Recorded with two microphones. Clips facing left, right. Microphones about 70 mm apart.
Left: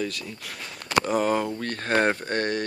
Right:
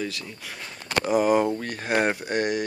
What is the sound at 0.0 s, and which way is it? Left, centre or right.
Speech, centre.